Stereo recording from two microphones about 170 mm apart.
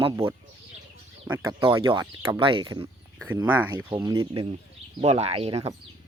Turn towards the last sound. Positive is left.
turn(degrees=-35)  # may be behind; listen again after turning